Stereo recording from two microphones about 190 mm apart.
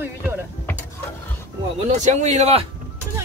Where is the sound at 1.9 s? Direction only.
35° right (ahead or behind).